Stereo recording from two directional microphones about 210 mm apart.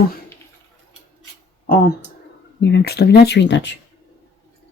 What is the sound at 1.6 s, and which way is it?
Speech, 40° left (ahead or behind).